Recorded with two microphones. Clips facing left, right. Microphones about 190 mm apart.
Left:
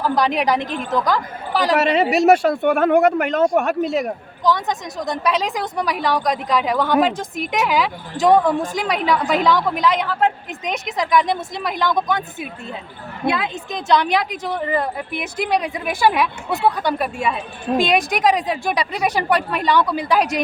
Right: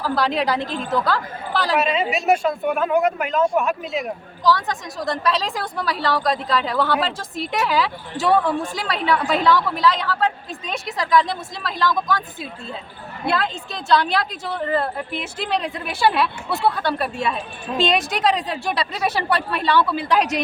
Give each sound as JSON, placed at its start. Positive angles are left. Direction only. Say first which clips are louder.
{"t": 0.0, "sound": "speech", "louder": "left 2 dB", "side_deg": 15}
{"t": 1.8, "sound": "speech", "louder": "left 6 dB", "side_deg": 75}
{"t": 4.4, "sound": "speech", "louder": "left 1 dB", "side_deg": 20}